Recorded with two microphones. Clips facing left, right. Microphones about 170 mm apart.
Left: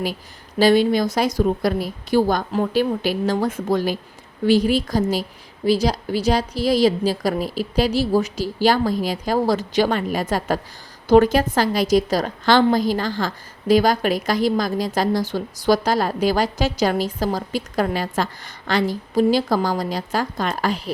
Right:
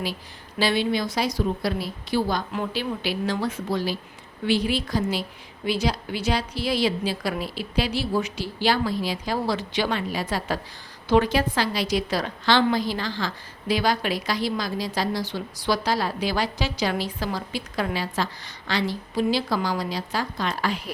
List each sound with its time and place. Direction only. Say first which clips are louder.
0.6 s a woman's voice: left 8 dB; 45° left (ahead or behind)